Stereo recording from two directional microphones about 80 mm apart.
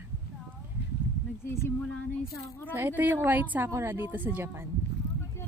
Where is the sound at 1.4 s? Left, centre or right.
Left.